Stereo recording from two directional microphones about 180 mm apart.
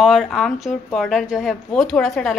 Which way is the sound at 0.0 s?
Centre (ahead or behind).